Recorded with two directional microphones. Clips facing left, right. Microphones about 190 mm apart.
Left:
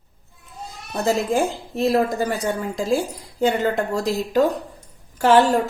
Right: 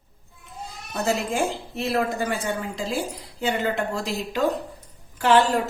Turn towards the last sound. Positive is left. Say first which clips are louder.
# left 3 dB
turn(degrees=45)  # may be behind; listen again after turning